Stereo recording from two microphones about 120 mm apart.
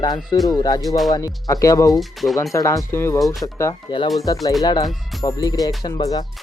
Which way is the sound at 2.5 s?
25° left (ahead or behind).